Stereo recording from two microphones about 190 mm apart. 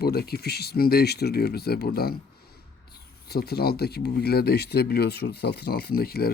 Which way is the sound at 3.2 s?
55° left (ahead or behind).